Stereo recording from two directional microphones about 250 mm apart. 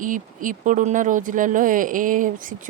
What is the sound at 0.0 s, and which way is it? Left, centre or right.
Speech, right.